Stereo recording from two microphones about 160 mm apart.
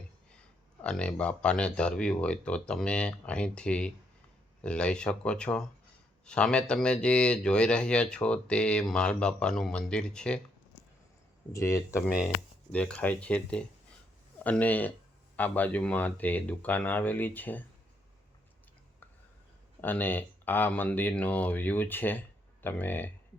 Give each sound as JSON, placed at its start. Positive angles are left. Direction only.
{"t": 0.8, "sound": "speech", "side_deg": 5}
{"t": 11.5, "sound": "speech", "side_deg": 20}
{"t": 12.7, "sound": "speech", "side_deg": 5}
{"t": 19.8, "sound": "speech", "side_deg": 10}